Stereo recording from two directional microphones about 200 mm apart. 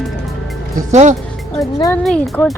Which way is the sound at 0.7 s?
35° right (ahead or behind).